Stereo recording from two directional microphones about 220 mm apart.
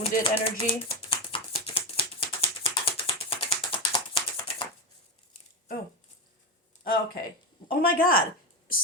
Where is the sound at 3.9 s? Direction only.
25° left (ahead or behind).